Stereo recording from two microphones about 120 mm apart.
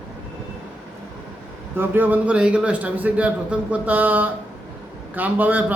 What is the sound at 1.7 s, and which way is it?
A man's voice, 20° right (ahead or behind).